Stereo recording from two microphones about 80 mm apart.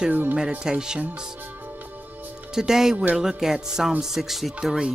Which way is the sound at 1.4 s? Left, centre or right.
Right.